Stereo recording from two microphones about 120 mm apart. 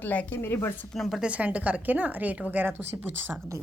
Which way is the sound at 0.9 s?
Centre (ahead or behind).